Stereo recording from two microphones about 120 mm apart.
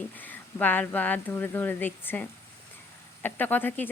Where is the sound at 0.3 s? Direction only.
15° left (ahead or behind).